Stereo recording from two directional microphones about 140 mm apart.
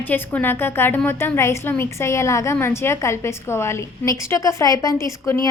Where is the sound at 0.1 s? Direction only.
15° left (ahead or behind).